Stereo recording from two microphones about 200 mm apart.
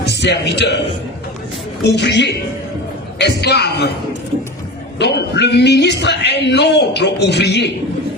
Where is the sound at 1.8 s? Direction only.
60° left (ahead or behind).